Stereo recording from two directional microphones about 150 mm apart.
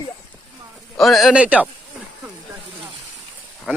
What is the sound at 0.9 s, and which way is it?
Speech, centre (ahead or behind).